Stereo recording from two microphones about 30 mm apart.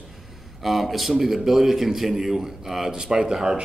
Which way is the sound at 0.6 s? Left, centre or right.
Centre.